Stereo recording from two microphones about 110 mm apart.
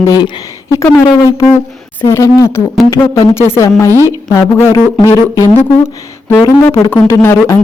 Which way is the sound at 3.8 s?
30° right (ahead or behind).